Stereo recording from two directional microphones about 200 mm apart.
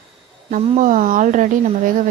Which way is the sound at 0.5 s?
40° right (ahead or behind).